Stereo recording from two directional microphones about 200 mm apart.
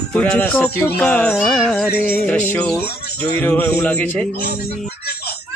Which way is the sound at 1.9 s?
50° left (ahead or behind).